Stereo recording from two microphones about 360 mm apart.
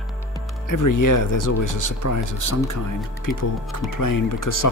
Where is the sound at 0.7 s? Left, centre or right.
Left.